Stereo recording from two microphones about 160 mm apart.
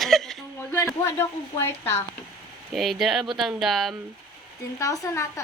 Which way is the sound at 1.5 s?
15° left (ahead or behind).